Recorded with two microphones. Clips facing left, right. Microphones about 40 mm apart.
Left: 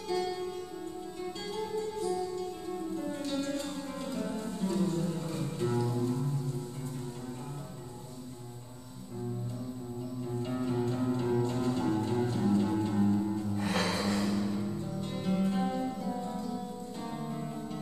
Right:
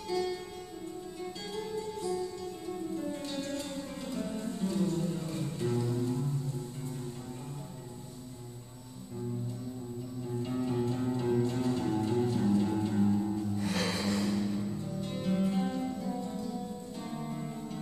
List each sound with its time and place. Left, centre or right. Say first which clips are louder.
0.1 s music: even; centre
1.6 s music: left 3 dB; centre
10.3 s music: right 1 dB; centre
13.6 s music: left 4 dB; left
13.8 s music: left 1 dB; centre